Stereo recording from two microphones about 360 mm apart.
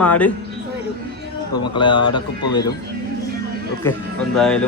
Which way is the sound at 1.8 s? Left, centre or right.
Centre.